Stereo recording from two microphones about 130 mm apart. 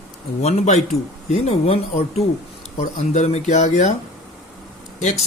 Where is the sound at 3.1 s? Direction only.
65° left (ahead or behind).